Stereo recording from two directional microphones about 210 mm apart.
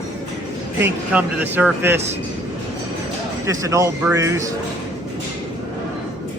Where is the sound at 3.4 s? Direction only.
15° right (ahead or behind).